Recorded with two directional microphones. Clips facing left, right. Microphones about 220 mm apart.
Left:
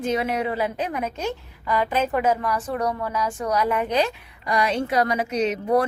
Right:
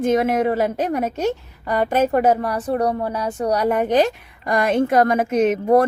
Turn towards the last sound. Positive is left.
turn(degrees=-50)  # may be behind; listen again after turning